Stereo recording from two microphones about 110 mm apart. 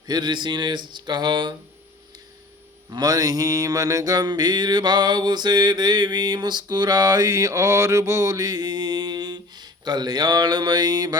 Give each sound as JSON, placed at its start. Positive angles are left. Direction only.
{"t": 0.1, "sound": "mantra", "side_deg": -40}
{"t": 2.9, "sound": "mantra", "side_deg": -35}